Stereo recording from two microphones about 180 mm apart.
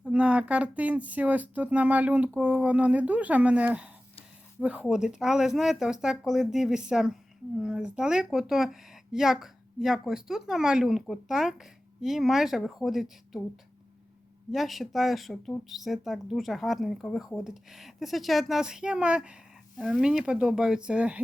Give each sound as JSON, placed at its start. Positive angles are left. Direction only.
{"t": 0.0, "sound": "speech", "side_deg": -5}
{"t": 14.5, "sound": "speech", "side_deg": 0}